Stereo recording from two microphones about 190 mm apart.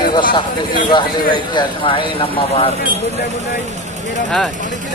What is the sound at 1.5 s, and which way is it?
Speech, 25° left (ahead or behind).